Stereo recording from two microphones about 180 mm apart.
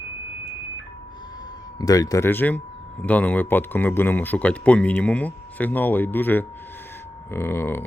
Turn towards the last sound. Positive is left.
turn(degrees=10)  # may be behind; listen again after turning